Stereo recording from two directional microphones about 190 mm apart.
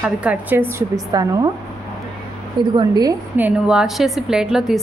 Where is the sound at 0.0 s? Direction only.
10° right (ahead or behind).